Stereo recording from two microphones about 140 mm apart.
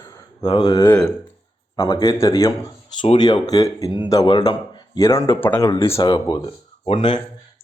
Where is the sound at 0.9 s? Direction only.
5° left (ahead or behind).